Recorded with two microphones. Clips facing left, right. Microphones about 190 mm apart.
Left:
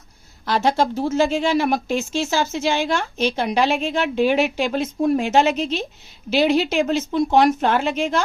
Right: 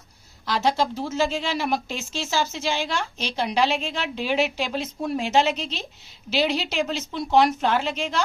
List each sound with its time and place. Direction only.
0.4 s a woman's voice: 55° left (ahead or behind)